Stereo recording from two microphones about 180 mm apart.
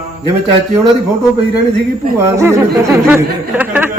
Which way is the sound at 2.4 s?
15° right (ahead or behind).